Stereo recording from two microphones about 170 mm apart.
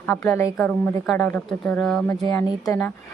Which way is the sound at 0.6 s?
5° left (ahead or behind).